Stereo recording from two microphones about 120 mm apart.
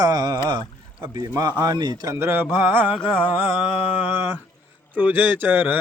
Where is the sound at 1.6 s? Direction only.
35° right (ahead or behind).